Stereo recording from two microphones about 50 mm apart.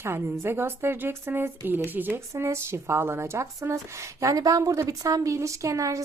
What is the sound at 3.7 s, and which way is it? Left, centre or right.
A woman's voice, right.